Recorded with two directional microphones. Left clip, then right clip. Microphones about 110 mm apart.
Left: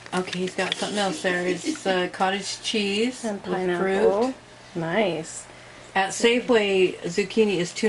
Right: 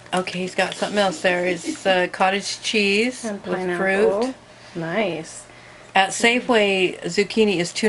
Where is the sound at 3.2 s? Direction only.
5° right (ahead or behind).